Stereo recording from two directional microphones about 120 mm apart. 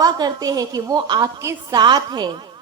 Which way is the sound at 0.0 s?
30° right (ahead or behind).